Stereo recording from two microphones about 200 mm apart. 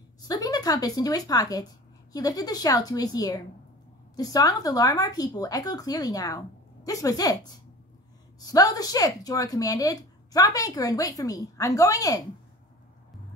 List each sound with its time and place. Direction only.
0.2 s a woman's voice: 20° left (ahead or behind)
8.4 s a woman's voice: 20° left (ahead or behind)